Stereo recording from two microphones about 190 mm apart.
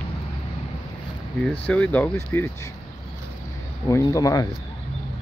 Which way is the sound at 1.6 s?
10° left (ahead or behind).